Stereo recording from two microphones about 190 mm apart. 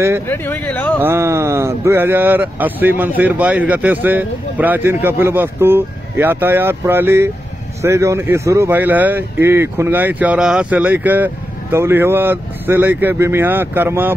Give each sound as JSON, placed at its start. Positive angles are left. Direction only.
{"t": 0.3, "sound": "speech", "side_deg": 10}
{"t": 1.0, "sound": "speech", "side_deg": -15}